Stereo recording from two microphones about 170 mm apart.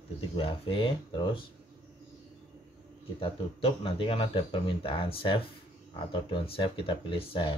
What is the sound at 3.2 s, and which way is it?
Speech, 30° left (ahead or behind).